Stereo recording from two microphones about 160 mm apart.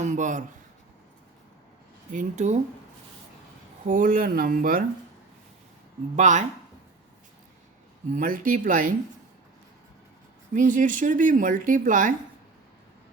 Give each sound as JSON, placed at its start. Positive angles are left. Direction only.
{"t": 0.0, "sound": "speech", "side_deg": -50}
{"t": 2.1, "sound": "speech", "side_deg": -50}
{"t": 3.8, "sound": "speech", "side_deg": -55}
{"t": 6.1, "sound": "speech", "side_deg": -50}
{"t": 8.1, "sound": "speech", "side_deg": -60}
{"t": 10.5, "sound": "speech", "side_deg": -55}